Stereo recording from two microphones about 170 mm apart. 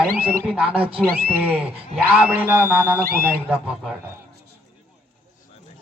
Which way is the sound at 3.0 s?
60° right (ahead or behind).